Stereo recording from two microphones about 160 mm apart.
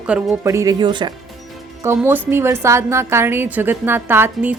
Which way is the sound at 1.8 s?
15° right (ahead or behind).